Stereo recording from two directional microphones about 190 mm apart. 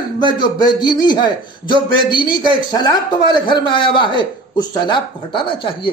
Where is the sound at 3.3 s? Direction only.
25° left (ahead or behind).